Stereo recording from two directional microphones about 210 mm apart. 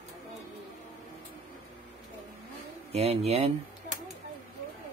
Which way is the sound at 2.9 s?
30° right (ahead or behind).